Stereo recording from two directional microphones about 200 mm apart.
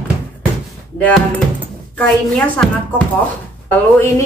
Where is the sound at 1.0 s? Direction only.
5° left (ahead or behind).